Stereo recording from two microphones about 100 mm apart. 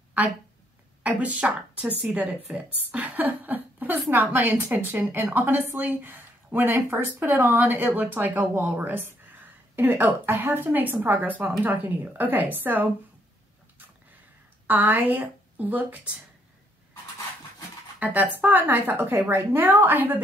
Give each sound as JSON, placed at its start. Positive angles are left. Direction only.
{"t": 0.2, "sound": "a woman's voice", "side_deg": -15}
{"t": 14.7, "sound": "speech", "side_deg": -15}
{"t": 17.9, "sound": "a woman's voice", "side_deg": -15}